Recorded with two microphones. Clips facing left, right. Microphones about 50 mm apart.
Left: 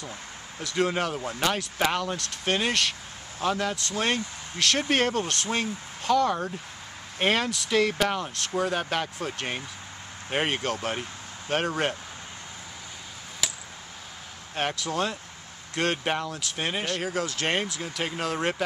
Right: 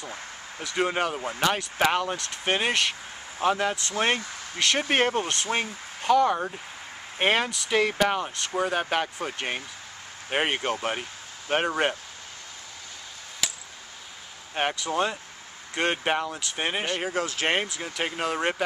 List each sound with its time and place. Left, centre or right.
0.0 s speech: centre
13.4 s a sound: centre
14.5 s speech: centre